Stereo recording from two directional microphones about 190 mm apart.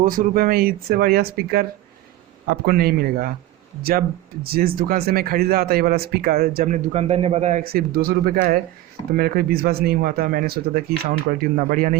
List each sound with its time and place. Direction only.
0.0 s speech: 45° right (ahead or behind)
4.4 s speech: 50° right (ahead or behind); by 7.6 s 35° right (ahead or behind)
7.6 s speech: 50° right (ahead or behind)